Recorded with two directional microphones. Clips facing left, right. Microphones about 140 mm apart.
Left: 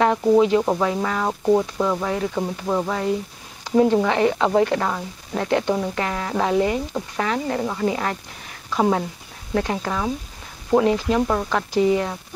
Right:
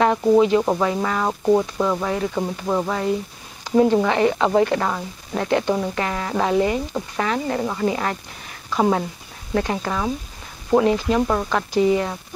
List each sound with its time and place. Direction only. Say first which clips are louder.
0.5 s a woman's voice: right 1 dB; 30° right (ahead or behind)
4.1 s a woman's voice: right 1 dB; 25° right (ahead or behind)